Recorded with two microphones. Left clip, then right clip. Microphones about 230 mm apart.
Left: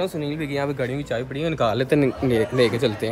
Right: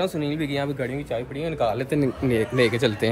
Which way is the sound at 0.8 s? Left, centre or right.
Left.